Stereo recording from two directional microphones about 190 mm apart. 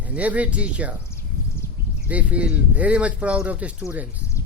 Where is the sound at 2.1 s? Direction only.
5° right (ahead or behind).